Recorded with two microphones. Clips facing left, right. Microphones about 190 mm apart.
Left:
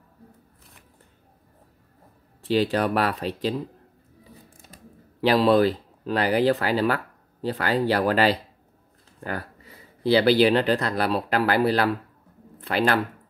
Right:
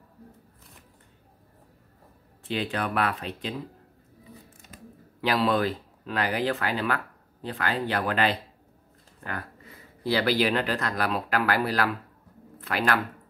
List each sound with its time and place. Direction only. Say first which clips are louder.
2.4 s speech: left 7 dB; 35° left (ahead or behind)
5.2 s speech: left 6 dB; 35° left (ahead or behind)
10.0 s speech: left 6 dB; 30° left (ahead or behind)